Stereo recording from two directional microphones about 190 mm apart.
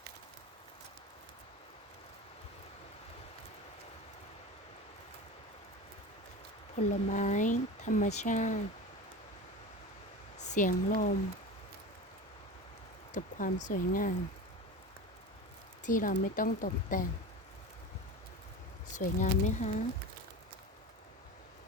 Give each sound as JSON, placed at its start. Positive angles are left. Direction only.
{"t": 6.7, "sound": "speech", "side_deg": 40}
{"t": 10.3, "sound": "speech", "side_deg": 40}
{"t": 13.1, "sound": "speech", "side_deg": 45}
{"t": 15.8, "sound": "speech", "side_deg": 45}
{"t": 18.9, "sound": "speech", "side_deg": 40}